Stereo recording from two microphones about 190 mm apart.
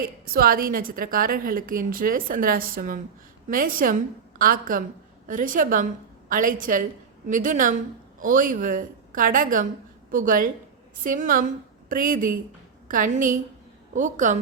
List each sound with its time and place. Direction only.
0.0 s a woman's voice: 50° right (ahead or behind)